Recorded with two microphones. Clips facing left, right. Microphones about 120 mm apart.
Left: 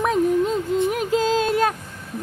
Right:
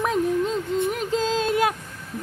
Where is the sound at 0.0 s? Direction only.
Centre (ahead or behind).